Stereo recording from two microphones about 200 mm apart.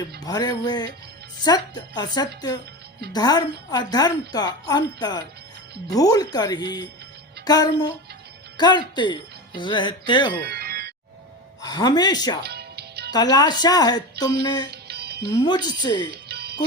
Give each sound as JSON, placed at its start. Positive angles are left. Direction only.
{"t": 0.2, "sound": "a woman's voice", "side_deg": 20}
{"t": 10.4, "sound": "music", "side_deg": -50}
{"t": 11.6, "sound": "speech", "side_deg": 20}
{"t": 12.4, "sound": "music", "side_deg": -55}
{"t": 13.1, "sound": "a woman's voice", "side_deg": 20}
{"t": 14.7, "sound": "music", "side_deg": -55}
{"t": 15.4, "sound": "a woman's voice", "side_deg": 20}
{"t": 16.1, "sound": "music", "side_deg": -55}